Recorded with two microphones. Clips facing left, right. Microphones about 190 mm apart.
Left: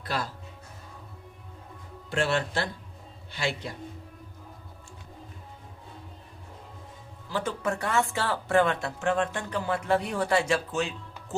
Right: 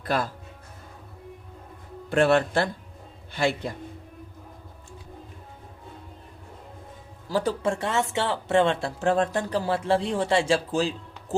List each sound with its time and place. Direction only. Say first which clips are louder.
0.0 s speech: right 6 dB; 55° right (ahead or behind)
2.0 s a man's voice: right 7 dB; 55° right (ahead or behind)
7.3 s speech: right 5 dB; 35° right (ahead or behind)